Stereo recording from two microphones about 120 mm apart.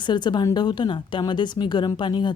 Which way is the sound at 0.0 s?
40° left (ahead or behind).